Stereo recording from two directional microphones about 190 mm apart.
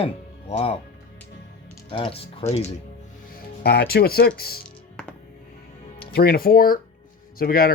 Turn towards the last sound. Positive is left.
turn(degrees=50)  # may be behind; listen again after turning